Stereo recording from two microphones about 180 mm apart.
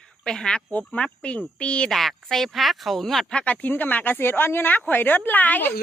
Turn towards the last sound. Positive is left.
turn(degrees=10)  # may be behind; listen again after turning